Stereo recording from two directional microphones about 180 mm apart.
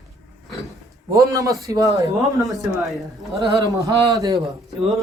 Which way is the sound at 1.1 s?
15° right (ahead or behind).